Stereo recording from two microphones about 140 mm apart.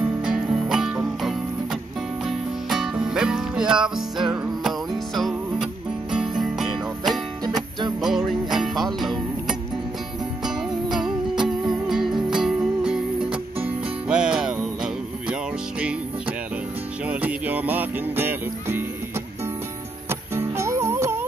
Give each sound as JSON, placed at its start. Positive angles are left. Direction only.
{"t": 0.2, "sound": "music", "side_deg": -5}
{"t": 17.1, "sound": "music", "side_deg": -10}
{"t": 20.1, "sound": "music", "side_deg": -20}